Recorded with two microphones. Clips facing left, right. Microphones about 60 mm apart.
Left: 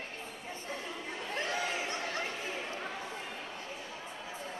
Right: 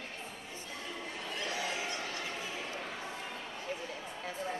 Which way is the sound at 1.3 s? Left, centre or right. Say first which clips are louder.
Left 3 dB; left.